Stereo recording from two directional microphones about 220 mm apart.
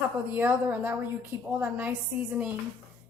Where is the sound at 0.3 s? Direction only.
10° right (ahead or behind).